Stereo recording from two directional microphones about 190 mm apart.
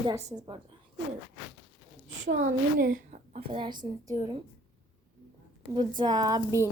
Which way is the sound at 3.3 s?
30° right (ahead or behind).